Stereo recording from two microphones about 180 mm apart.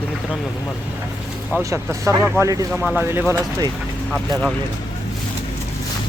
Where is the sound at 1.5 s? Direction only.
15° right (ahead or behind).